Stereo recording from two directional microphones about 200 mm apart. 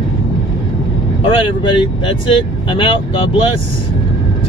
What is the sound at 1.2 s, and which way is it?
Speech, 25° left (ahead or behind).